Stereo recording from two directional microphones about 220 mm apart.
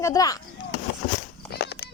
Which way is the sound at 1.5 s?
50° left (ahead or behind).